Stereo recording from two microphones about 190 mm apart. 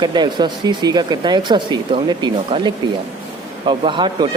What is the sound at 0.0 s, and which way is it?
A man's voice, 20° right (ahead or behind).